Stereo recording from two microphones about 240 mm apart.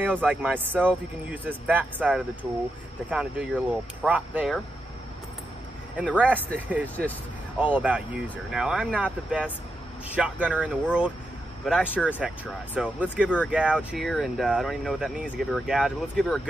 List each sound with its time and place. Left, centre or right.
0.0 s speech: centre
5.9 s speech: centre
7.5 s speech: centre